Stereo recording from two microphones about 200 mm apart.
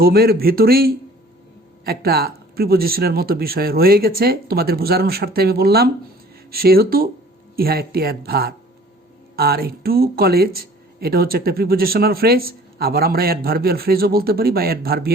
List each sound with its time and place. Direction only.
0.0 s speech: 50° right (ahead or behind)